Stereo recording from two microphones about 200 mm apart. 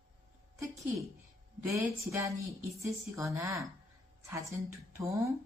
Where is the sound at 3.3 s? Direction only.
15° right (ahead or behind).